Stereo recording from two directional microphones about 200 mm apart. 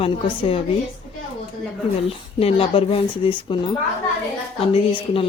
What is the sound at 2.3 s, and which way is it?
Speech, 30° left (ahead or behind).